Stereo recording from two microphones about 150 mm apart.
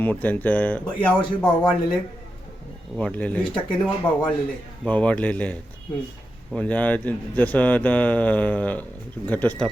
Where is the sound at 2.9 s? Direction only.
10° left (ahead or behind).